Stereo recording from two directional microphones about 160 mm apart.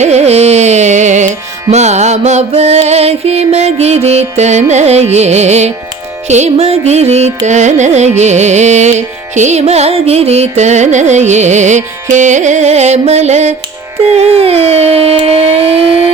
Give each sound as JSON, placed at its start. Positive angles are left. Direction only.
{"t": 0.0, "sound": "music", "side_deg": -45}
{"t": 4.7, "sound": "carnatic music", "side_deg": -45}
{"t": 14.1, "sound": "a sound", "side_deg": -40}